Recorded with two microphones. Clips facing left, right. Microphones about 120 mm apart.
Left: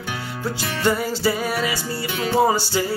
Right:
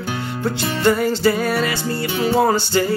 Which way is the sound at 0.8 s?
5° left (ahead or behind).